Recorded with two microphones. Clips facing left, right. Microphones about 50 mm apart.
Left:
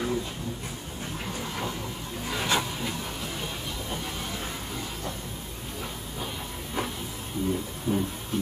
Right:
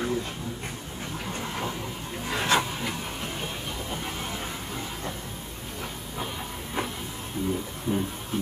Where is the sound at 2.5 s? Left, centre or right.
Right.